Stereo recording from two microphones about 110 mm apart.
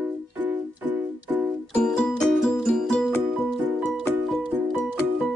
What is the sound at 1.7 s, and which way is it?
Music, 5° left (ahead or behind).